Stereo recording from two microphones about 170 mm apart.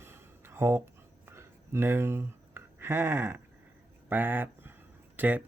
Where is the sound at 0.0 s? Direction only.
15° right (ahead or behind).